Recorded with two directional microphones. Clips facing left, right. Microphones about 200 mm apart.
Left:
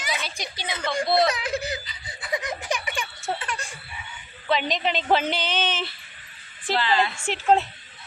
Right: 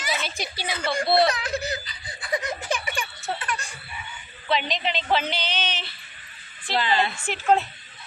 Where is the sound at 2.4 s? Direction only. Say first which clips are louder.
Right 1 dB; 15° left (ahead or behind).